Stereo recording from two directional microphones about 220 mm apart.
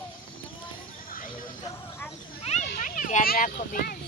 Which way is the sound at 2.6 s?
40° left (ahead or behind).